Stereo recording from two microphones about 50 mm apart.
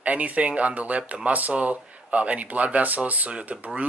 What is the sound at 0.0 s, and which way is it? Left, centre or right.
Speech, right.